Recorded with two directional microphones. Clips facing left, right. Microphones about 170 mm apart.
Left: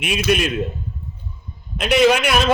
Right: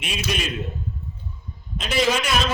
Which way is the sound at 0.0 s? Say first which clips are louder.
Left 9 dB; 60° left (ahead or behind).